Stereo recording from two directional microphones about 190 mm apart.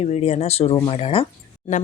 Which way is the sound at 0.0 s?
35° left (ahead or behind).